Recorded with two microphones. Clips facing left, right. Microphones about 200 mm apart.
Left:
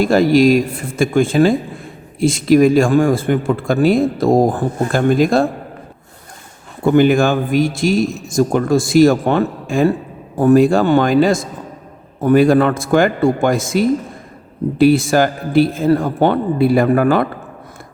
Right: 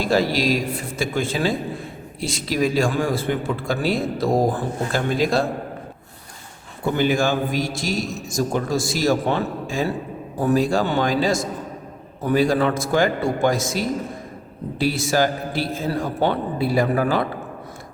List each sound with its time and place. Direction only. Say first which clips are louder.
0.0 s a man's voice: left 9 dB; 50° left (ahead or behind)
6.8 s a man's voice: left 8 dB; 55° left (ahead or behind)